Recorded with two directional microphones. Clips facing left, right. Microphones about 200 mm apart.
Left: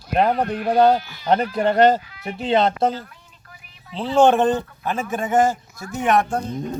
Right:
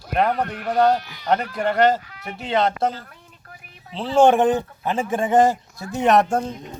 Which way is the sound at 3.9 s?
5° right (ahead or behind).